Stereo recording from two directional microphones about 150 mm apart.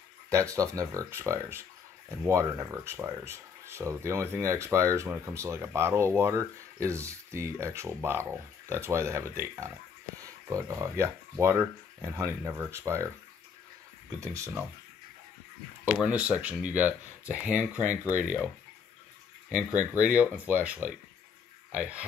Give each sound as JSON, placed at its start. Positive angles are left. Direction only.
{"t": 0.3, "sound": "speech", "side_deg": -20}
{"t": 14.2, "sound": "speech", "side_deg": -20}
{"t": 15.8, "sound": "speech", "side_deg": -10}
{"t": 19.5, "sound": "speech", "side_deg": -10}